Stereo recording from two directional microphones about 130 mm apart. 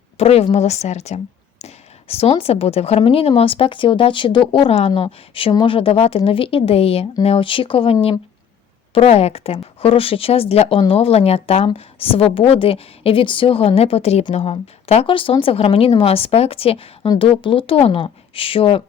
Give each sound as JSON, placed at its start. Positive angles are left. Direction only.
{"t": 0.2, "sound": "speech", "side_deg": 50}
{"t": 9.0, "sound": "speech", "side_deg": 50}